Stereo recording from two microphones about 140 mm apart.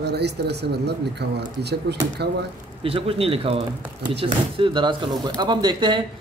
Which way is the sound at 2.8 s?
40° right (ahead or behind).